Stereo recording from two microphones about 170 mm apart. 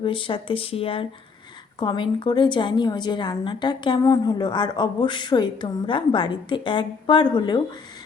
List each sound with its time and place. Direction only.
0.0 s a woman's voice: 30° left (ahead or behind)